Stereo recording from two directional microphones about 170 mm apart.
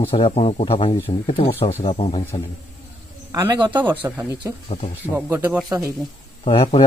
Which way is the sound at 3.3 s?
20° right (ahead or behind).